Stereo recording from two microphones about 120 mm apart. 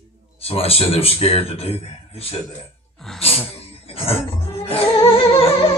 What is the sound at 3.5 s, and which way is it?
Music, 55° left (ahead or behind).